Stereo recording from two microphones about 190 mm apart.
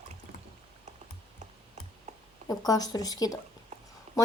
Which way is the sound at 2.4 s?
20° left (ahead or behind).